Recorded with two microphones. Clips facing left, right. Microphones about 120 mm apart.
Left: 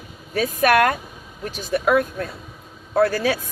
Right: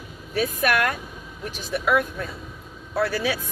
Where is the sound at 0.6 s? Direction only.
50° left (ahead or behind).